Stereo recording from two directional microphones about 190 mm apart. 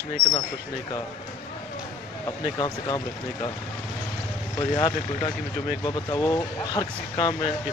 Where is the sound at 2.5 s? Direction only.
20° left (ahead or behind).